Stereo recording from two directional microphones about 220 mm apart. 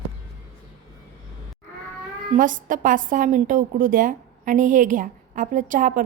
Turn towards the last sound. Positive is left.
turn(degrees=-40)  # may be behind; listen again after turning